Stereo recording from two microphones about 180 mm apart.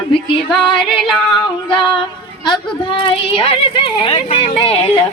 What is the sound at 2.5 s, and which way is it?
A woman's voice, 25° left (ahead or behind).